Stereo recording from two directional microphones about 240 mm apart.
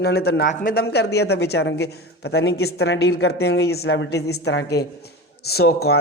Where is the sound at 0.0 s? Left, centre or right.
Left.